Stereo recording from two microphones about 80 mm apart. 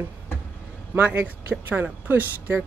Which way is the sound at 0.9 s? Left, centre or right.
Centre.